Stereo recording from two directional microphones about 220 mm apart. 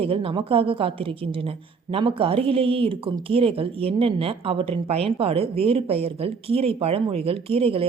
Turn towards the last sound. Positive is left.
turn(degrees=-25)  # may be behind; listen again after turning